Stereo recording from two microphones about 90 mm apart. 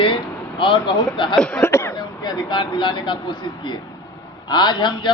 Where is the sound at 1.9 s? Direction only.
50° left (ahead or behind).